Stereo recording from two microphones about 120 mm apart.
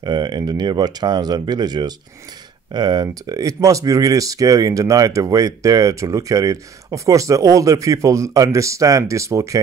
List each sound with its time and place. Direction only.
0.0 s speech: 40° right (ahead or behind)